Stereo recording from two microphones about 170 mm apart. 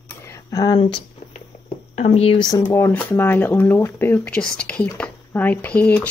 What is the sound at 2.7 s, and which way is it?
Speech, 15° left (ahead or behind).